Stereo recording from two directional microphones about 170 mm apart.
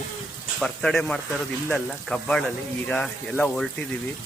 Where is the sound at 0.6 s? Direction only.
5° left (ahead or behind).